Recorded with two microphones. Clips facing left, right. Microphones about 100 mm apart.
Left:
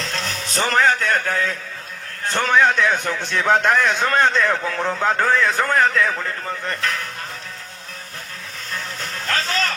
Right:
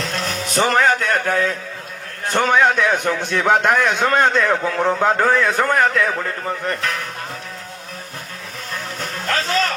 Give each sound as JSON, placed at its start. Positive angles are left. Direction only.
{"t": 0.3, "sound": "music", "side_deg": -35}
{"t": 2.3, "sound": "a man's voice", "side_deg": -35}
{"t": 9.0, "sound": "a sound", "side_deg": -35}